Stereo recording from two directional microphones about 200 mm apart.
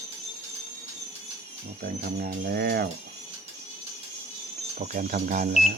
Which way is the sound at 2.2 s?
50° right (ahead or behind).